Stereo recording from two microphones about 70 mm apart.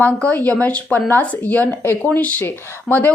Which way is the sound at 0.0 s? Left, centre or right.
Left.